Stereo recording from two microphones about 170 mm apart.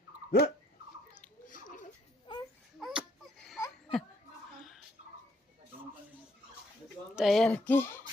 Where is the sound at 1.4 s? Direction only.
50° left (ahead or behind).